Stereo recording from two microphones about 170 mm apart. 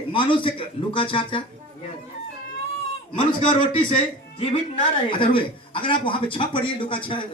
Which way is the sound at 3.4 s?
35° left (ahead or behind).